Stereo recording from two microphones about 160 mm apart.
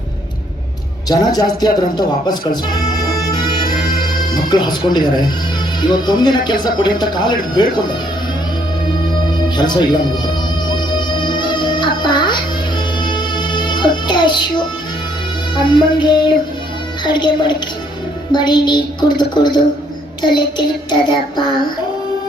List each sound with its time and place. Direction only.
1.2 s speech: 25° left (ahead or behind)
4.4 s speech: 25° left (ahead or behind)
9.6 s music: 25° left (ahead or behind)
15.5 s speech: 30° left (ahead or behind)